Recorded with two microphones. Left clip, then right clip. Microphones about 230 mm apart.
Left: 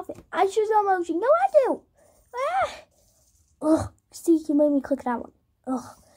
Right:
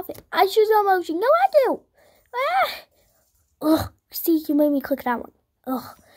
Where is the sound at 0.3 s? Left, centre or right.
Right.